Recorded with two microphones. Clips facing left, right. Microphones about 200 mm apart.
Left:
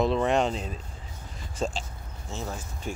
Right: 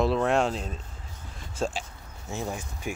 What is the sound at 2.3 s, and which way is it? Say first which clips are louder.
Speech: right 3 dB; 15° right (ahead or behind).